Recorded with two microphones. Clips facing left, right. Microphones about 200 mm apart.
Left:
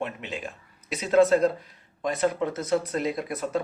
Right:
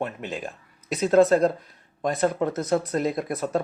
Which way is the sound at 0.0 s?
45° right (ahead or behind).